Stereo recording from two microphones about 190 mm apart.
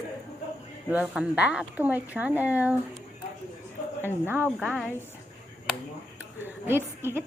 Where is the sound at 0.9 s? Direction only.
5° right (ahead or behind).